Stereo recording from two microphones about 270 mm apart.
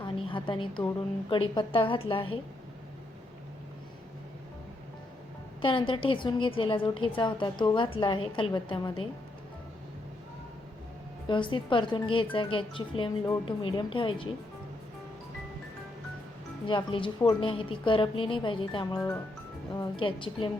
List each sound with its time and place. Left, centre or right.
0.0 s a sound: centre
1.3 s speech: centre
5.6 s a woman's voice: centre
11.3 s speech: centre
16.6 s speech: centre